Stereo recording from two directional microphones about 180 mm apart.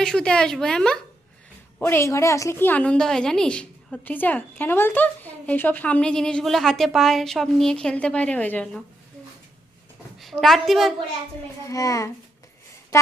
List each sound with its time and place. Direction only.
0.0 s a woman's voice: 5° left (ahead or behind)
1.8 s a woman's voice: 15° left (ahead or behind)
10.2 s a woman's voice: centre (ahead or behind)
11.6 s a child's voice: 20° left (ahead or behind)